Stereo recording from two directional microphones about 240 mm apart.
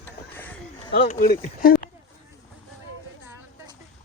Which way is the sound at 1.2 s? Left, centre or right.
Left.